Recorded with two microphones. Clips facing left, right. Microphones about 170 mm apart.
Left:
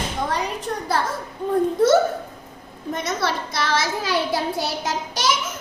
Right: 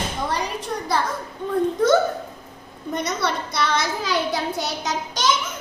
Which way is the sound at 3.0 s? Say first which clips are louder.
Left 1 dB; 5° left (ahead or behind).